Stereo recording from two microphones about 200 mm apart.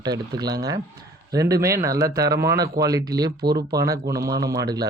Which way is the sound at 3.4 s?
55° right (ahead or behind).